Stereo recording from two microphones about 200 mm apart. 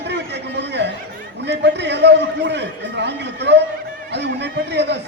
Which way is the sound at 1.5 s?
60° right (ahead or behind).